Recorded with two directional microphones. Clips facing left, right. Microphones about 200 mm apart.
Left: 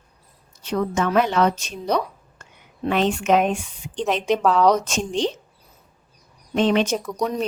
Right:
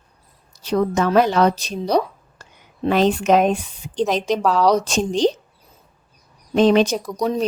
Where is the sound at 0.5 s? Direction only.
35° right (ahead or behind).